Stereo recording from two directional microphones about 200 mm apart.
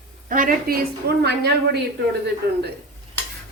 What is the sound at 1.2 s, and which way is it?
Speech, 55° right (ahead or behind).